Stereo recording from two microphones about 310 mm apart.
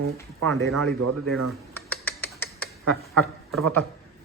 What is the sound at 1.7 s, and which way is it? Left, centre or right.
Typing, centre.